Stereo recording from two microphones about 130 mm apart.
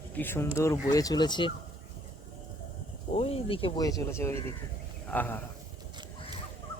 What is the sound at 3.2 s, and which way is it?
Speech, 50° left (ahead or behind).